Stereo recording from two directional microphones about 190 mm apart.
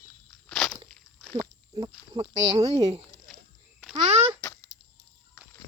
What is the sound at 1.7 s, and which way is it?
Speech, 20° right (ahead or behind).